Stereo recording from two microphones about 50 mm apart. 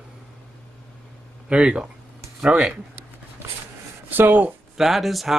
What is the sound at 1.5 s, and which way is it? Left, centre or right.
Speech, centre.